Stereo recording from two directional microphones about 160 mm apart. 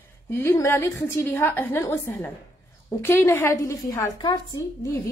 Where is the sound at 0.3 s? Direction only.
15° left (ahead or behind).